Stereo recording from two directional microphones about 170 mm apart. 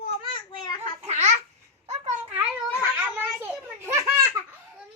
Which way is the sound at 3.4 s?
15° right (ahead or behind).